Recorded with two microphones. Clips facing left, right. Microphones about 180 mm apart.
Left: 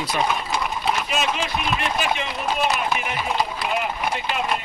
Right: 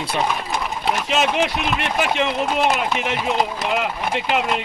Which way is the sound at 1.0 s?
80° right.